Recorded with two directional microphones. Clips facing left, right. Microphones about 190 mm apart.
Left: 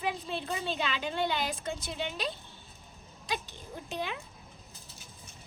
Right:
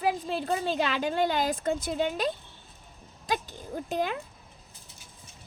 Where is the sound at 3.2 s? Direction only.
45° right (ahead or behind).